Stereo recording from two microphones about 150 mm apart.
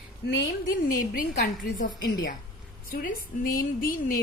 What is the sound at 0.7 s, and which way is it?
A woman's voice, 65° left (ahead or behind).